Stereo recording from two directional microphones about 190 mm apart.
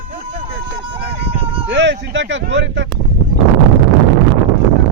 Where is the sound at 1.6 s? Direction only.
70° right (ahead or behind).